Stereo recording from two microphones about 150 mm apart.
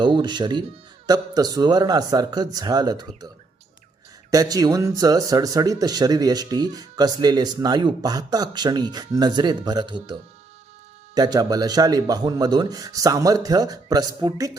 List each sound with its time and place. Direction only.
0.0 s speech: 30° right (ahead or behind)
4.3 s speech: 25° right (ahead or behind)